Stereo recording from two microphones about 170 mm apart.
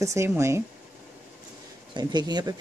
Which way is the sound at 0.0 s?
15° right (ahead or behind).